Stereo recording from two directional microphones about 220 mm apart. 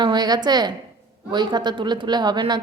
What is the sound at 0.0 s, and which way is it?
A woman's voice, 20° right (ahead or behind).